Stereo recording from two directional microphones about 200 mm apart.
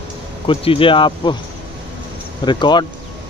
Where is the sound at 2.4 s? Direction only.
20° left (ahead or behind).